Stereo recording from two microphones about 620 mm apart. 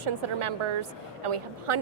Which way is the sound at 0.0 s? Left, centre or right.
Right.